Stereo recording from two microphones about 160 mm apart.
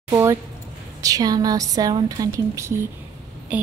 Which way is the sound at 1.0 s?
25° right (ahead or behind).